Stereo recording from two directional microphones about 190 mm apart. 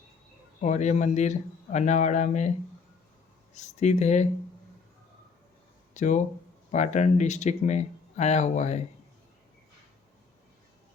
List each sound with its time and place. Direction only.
0.6 s speech: 40° left (ahead or behind)
3.5 s speech: 35° left (ahead or behind)
5.9 s speech: 40° left (ahead or behind)